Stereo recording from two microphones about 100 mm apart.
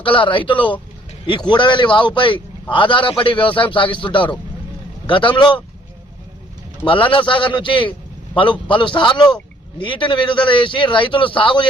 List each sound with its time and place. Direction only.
0.0 s a man's voice: 60° left (ahead or behind)
6.8 s a man's voice: 60° left (ahead or behind)